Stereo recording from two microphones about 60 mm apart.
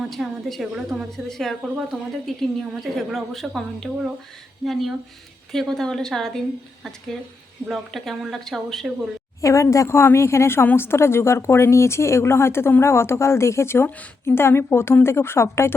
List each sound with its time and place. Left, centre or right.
0.0 s a woman's voice: centre
9.4 s speech: left